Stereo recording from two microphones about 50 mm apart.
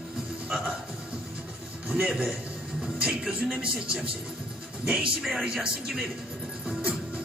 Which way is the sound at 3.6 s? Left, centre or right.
Centre.